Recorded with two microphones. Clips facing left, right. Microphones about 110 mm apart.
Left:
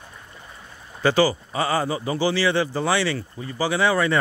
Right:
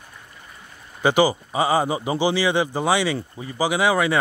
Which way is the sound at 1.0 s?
15° right (ahead or behind).